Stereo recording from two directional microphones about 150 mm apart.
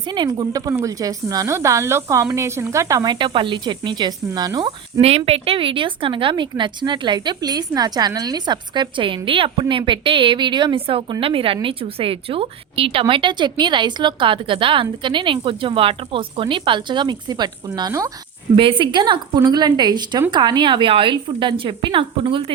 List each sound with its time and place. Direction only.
0.1 s a woman's voice: 30° right (ahead or behind)
4.9 s a woman's voice: 45° right (ahead or behind)